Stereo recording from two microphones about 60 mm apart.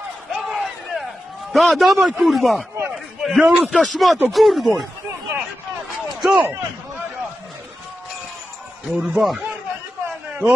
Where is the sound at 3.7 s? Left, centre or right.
Centre.